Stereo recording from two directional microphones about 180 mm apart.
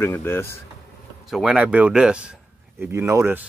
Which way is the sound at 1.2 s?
5° right (ahead or behind).